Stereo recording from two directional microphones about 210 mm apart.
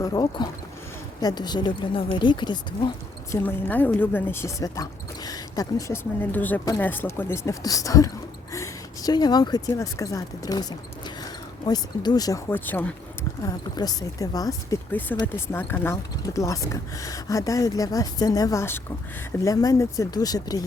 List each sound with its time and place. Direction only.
0.0 s speech: 20° left (ahead or behind)
3.3 s speech: 10° left (ahead or behind)